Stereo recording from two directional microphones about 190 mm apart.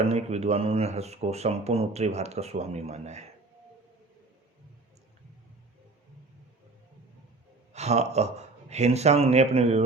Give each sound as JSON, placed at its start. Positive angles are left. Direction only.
{"t": 0.0, "sound": "speech", "side_deg": -35}
{"t": 7.7, "sound": "speech", "side_deg": -35}